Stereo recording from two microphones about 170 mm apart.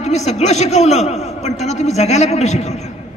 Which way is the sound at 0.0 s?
40° left (ahead or behind).